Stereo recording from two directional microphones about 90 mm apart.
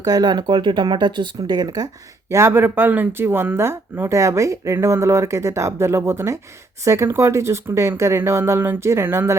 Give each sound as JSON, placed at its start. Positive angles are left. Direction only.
{"t": 0.0, "sound": "speech", "side_deg": -50}
{"t": 2.3, "sound": "speech", "side_deg": -25}